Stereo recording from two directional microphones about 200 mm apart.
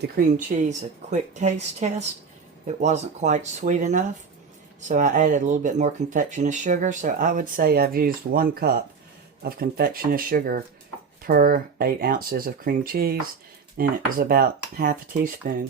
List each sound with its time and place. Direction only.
0.2 s speech: 45° right (ahead or behind)
2.6 s speech: 35° right (ahead or behind)